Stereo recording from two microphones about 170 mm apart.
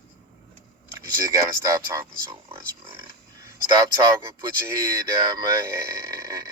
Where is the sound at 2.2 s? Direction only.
25° right (ahead or behind).